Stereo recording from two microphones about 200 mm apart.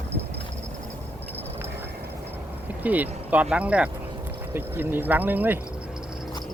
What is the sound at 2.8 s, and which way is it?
Speech, 10° right (ahead or behind).